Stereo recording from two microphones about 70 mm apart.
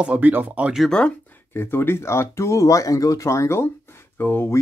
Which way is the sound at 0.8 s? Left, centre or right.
Centre.